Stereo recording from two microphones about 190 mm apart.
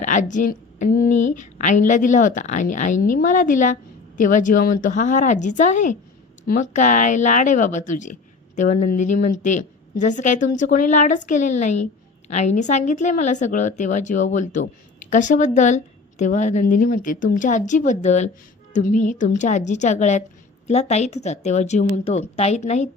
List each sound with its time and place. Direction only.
0.0 s a woman's voice: 40° left (ahead or behind)